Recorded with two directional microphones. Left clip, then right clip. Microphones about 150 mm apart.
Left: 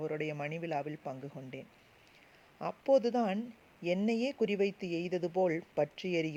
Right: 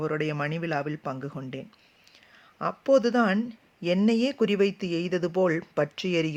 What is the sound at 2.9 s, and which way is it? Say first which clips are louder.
Speech: right 7 dB; 20° left (ahead or behind).